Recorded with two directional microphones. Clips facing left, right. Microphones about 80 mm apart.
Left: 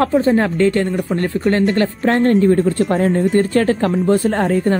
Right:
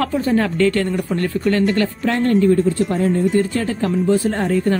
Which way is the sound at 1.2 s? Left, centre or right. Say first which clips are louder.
Left 2 dB; left.